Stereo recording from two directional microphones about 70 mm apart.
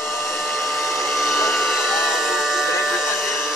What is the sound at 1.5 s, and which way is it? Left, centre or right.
Hair dryer, centre.